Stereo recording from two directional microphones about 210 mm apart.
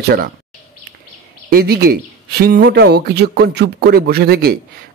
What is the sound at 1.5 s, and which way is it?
Speech, 50° right (ahead or behind).